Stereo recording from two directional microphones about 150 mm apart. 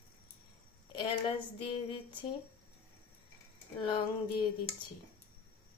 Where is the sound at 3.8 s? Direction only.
35° left (ahead or behind).